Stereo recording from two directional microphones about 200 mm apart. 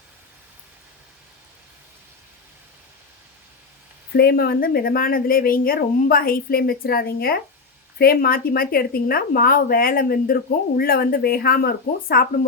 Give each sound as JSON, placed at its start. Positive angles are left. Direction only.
{"t": 4.1, "sound": "a woman's voice", "side_deg": 50}